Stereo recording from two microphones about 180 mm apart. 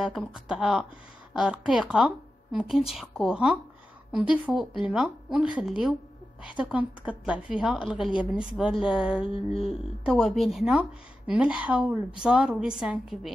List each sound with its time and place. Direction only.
0.0 s a woman's voice: 5° right (ahead or behind)
9.3 s a sound: 30° left (ahead or behind)
9.7 s a woman's voice: centre (ahead or behind)